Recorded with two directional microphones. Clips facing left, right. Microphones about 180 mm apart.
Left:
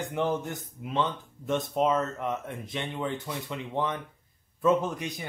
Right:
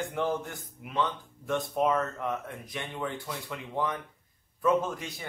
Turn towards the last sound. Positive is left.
turn(degrees=20)  # may be behind; listen again after turning